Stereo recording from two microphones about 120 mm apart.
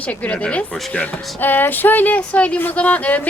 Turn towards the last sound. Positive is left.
turn(degrees=15)  # may be behind; listen again after turning